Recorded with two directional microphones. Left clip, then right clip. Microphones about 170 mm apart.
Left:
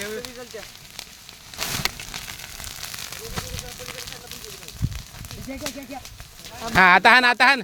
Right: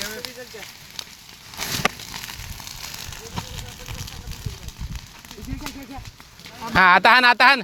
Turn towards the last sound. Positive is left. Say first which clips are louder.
# right 1 dB
turn(degrees=5)  # may be behind; listen again after turning